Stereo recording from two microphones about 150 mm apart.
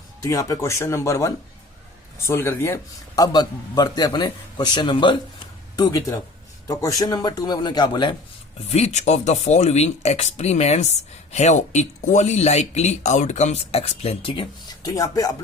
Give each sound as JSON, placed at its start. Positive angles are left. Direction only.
{"t": 0.2, "sound": "a man's voice", "side_deg": 20}
{"t": 8.7, "sound": "speech", "side_deg": 45}
{"t": 14.8, "sound": "a man's voice", "side_deg": 25}